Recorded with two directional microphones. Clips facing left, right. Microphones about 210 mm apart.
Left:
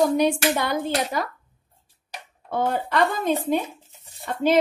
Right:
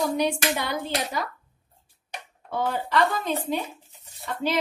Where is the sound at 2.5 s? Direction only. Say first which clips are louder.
Left 2 dB; 50° left (ahead or behind).